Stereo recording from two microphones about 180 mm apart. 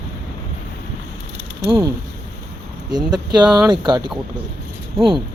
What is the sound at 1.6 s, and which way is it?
Speech, 30° right (ahead or behind).